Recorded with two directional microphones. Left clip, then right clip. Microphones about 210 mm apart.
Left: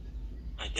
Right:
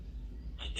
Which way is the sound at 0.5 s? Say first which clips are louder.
Left 6 dB; 50° left (ahead or behind).